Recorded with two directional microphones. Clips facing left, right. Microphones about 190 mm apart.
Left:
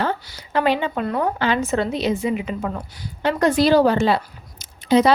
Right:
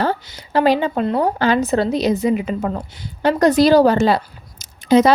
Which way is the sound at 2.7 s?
25° right (ahead or behind).